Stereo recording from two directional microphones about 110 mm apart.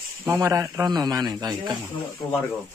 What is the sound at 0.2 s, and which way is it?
A man's voice, 20° right (ahead or behind).